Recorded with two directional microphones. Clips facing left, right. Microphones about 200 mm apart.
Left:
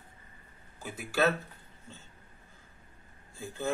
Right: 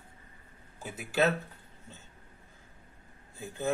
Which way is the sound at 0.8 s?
20° right (ahead or behind).